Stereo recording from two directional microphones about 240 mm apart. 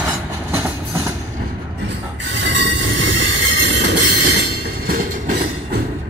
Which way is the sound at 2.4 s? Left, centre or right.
Right.